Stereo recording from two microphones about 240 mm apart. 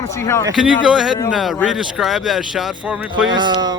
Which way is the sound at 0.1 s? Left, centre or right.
Centre.